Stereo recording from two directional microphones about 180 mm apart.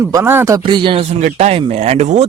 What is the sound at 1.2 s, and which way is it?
Speech, 40° right (ahead or behind).